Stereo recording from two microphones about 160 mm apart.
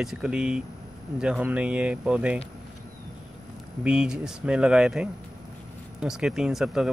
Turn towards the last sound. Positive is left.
turn(degrees=0)  # may be behind; listen again after turning